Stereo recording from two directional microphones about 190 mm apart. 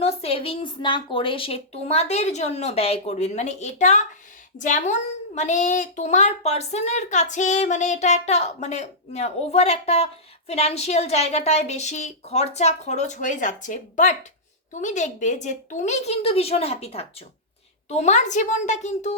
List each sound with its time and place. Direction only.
0.0 s a child's voice: 30° left (ahead or behind)